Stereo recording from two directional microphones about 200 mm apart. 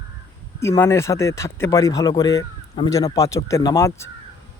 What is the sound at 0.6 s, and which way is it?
Speech, 15° left (ahead or behind).